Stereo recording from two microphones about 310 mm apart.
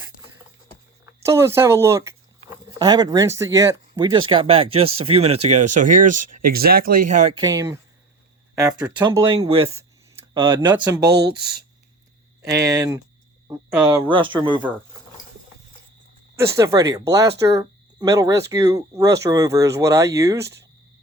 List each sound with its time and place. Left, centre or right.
1.2 s speech: centre; by 7.0 s right
7.3 s speech: centre
12.5 s speech: centre
16.3 s speech: centre